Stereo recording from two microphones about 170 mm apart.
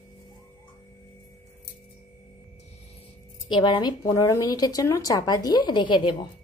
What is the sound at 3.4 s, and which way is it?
A woman's voice, 30° left (ahead or behind).